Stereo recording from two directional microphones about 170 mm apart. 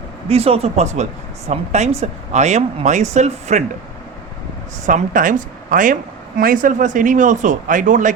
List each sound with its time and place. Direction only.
0.3 s a woman's voice: 35° right (ahead or behind)
4.9 s a woman's voice: 50° right (ahead or behind)